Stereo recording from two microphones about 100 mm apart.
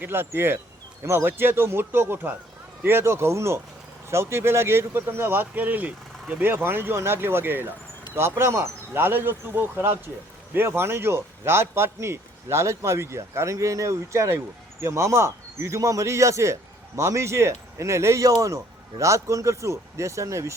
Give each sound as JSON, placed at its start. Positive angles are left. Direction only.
{"t": 0.0, "sound": "a man's voice", "side_deg": -20}